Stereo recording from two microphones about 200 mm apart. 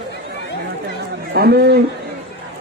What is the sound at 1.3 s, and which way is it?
Speech, 50° right (ahead or behind).